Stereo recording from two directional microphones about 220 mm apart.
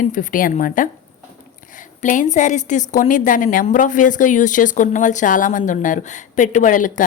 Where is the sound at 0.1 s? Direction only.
35° left (ahead or behind).